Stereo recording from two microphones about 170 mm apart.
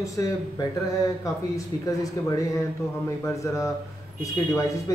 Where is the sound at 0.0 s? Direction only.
20° left (ahead or behind).